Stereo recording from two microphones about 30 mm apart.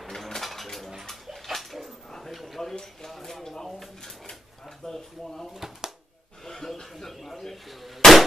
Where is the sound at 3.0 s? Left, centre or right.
Centre.